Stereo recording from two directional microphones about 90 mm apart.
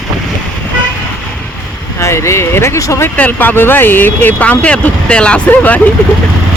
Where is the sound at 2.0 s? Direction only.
30° left (ahead or behind).